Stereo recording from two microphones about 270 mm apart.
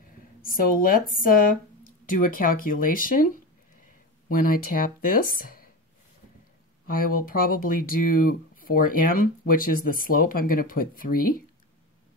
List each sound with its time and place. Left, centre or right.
0.4 s speech: left
4.3 s speech: left
6.9 s speech: left